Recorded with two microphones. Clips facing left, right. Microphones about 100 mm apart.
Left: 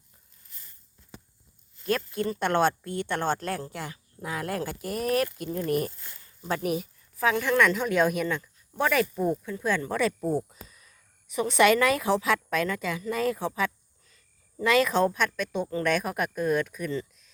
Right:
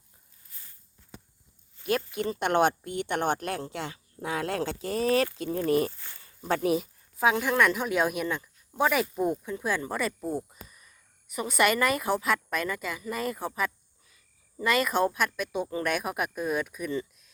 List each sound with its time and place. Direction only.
1.8 s speech: 15° right (ahead or behind)
6.4 s speech: 30° right (ahead or behind)
7.2 s speech: 15° right (ahead or behind)